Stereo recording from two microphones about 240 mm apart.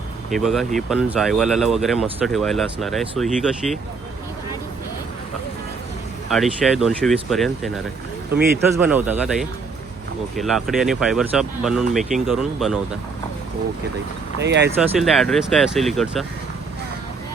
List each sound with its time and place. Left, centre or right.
0.3 s speech: centre
6.3 s speech: centre
8.7 s speech: centre
14.3 s speech: right
14.9 s speech: centre